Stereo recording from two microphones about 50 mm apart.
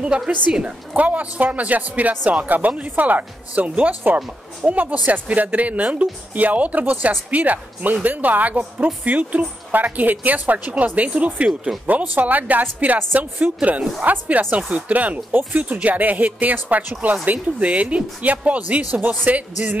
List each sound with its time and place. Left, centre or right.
0.5 s speech: right